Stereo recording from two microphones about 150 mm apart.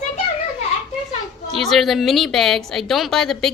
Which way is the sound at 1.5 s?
Centre (ahead or behind).